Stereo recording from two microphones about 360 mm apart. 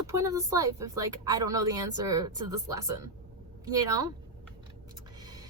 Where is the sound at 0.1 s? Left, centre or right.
Centre.